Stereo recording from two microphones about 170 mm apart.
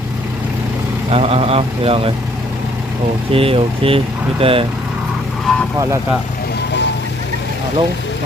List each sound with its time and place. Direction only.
1.1 s speech: 35° right (ahead or behind)
3.3 s speech: 35° right (ahead or behind)
5.5 s vehicle: 5° left (ahead or behind)